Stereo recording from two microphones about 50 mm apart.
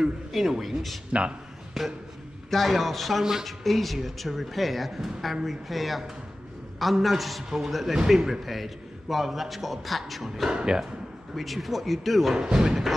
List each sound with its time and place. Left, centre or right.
0.0 s speech: centre
10.5 s speech: centre
11.3 s speech: centre
12.4 s speech: centre